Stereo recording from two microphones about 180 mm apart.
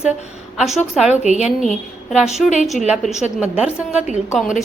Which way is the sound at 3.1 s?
40° left (ahead or behind).